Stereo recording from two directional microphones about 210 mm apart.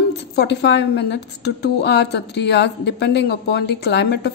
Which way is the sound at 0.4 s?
55° left (ahead or behind).